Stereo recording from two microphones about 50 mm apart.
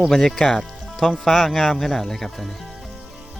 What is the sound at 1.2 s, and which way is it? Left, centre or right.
Speech, centre.